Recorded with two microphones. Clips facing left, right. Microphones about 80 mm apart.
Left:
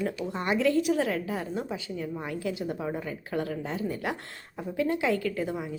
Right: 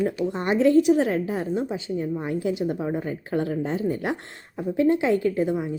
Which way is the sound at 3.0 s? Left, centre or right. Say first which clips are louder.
Right 5 dB; right.